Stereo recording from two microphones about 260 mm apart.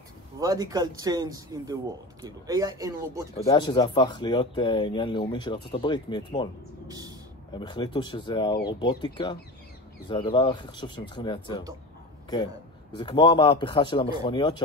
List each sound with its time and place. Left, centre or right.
0.4 s speech: centre
3.4 s speech: centre
6.9 s speech: centre
7.5 s speech: centre
12.9 s speech: centre